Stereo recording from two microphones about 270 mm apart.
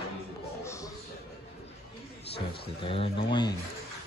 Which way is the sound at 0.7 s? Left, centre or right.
Centre.